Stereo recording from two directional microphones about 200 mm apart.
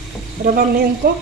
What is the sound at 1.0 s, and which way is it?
Speech, 55° right (ahead or behind).